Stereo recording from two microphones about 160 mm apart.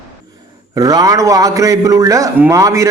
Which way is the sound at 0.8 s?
25° right (ahead or behind).